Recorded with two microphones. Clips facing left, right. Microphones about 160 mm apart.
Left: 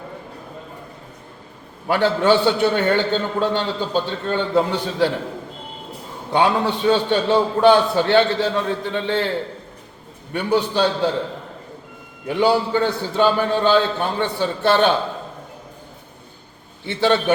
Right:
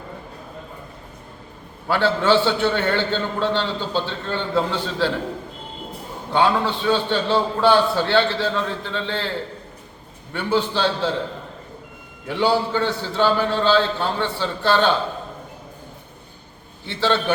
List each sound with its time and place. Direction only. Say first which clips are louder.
1.9 s a man's voice: left 2 dB; 15° left (ahead or behind)
6.3 s a man's voice: left 1 dB; 20° left (ahead or behind)
10.3 s a man's voice: left 2 dB; 15° left (ahead or behind)
12.3 s a man's voice: left 2 dB; 15° left (ahead or behind)
16.8 s a man's voice: left 3 dB; 20° left (ahead or behind)